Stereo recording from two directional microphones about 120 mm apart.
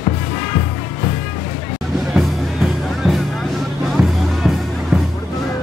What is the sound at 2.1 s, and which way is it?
Music, centre (ahead or behind).